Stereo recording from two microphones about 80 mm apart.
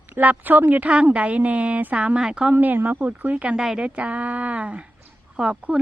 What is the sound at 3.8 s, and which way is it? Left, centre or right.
Speech, centre.